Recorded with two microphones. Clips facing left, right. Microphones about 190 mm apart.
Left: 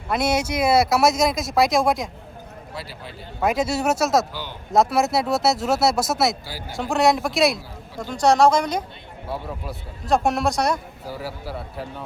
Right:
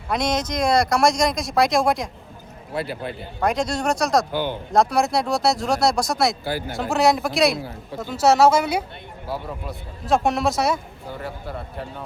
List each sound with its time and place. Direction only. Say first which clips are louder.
0.1 s speech: left 1 dB; 5° left (ahead or behind)
2.7 s a man's voice: right 10 dB; 55° right (ahead or behind)
3.4 s speech: left 1 dB; 5° left (ahead or behind)
4.3 s a man's voice: right 10 dB; 55° right (ahead or behind)
4.7 s speech: left 1 dB; centre (ahead or behind)
6.4 s a man's voice: right 9 dB; 55° right (ahead or behind)
6.7 s speech: left 1 dB; centre (ahead or behind)